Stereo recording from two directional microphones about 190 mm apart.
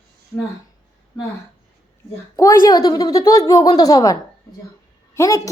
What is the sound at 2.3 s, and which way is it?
A woman's voice, 15° left (ahead or behind).